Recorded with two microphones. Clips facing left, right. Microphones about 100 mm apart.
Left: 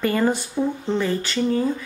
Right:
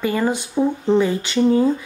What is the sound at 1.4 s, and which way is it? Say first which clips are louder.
Speech: right 7 dB; 20° right (ahead or behind).